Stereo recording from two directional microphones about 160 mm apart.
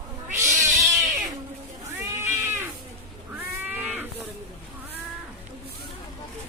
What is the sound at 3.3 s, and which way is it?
Livestock, 10° right (ahead or behind).